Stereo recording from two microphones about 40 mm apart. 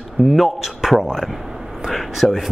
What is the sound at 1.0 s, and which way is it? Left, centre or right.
Speech, centre.